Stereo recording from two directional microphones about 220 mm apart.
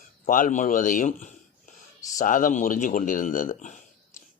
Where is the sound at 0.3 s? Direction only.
40° left (ahead or behind).